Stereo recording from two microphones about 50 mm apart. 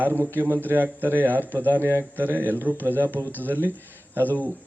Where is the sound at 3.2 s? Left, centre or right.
Right.